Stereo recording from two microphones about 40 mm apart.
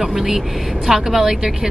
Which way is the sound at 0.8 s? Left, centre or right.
Centre.